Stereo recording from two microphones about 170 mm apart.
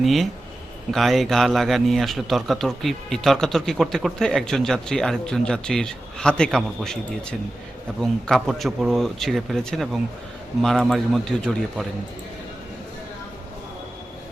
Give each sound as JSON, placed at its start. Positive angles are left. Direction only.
{"t": 0.0, "sound": "a man's voice", "side_deg": 0}